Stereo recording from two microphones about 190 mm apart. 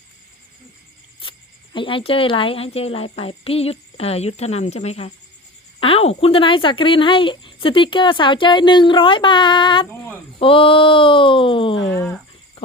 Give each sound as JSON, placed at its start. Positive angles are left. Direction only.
{"t": 1.2, "sound": "speech", "side_deg": 25}
{"t": 12.6, "sound": "insect", "side_deg": 30}